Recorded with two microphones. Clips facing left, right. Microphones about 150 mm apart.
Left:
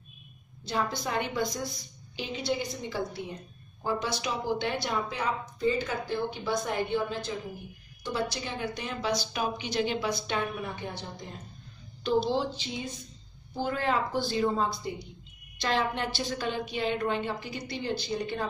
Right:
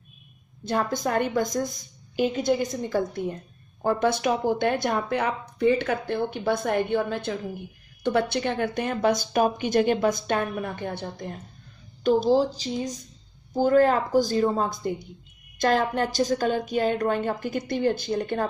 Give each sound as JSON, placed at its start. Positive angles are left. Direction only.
{"t": 0.7, "sound": "speech", "side_deg": -50}
{"t": 12.0, "sound": "speech", "side_deg": -45}